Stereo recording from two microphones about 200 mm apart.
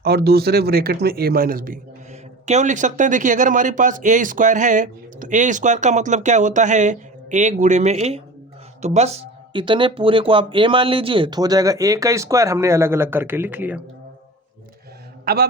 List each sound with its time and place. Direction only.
0.0 s speech: 50° right (ahead or behind); by 13.8 s 10° right (ahead or behind)
15.2 s a man's voice: 50° right (ahead or behind)